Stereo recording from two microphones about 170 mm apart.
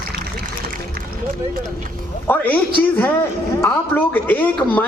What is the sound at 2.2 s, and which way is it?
Speech, 10° left (ahead or behind).